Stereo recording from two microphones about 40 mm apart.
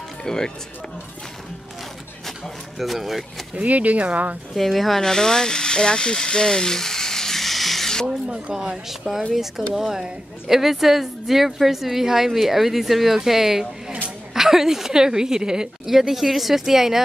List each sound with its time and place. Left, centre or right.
0.2 s speech: centre
2.8 s a woman's voice: centre
3.5 s speech: right
4.6 s a woman's voice: centre
5.0 s speech: centre
8.3 s speech: right
8.6 s a woman's voice: centre
10.5 s a woman's voice: centre